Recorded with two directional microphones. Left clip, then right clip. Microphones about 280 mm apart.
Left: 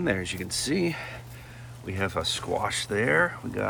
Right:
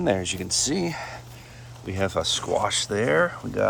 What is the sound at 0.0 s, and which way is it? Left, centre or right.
Speech, centre.